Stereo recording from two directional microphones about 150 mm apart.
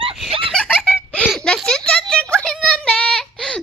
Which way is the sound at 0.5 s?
10° left (ahead or behind).